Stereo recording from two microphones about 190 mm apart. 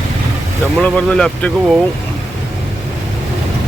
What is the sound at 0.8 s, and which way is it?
Speech, 5° left (ahead or behind).